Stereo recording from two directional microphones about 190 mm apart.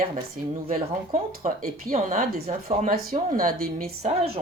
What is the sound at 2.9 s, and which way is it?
A woman's voice, 50° right (ahead or behind).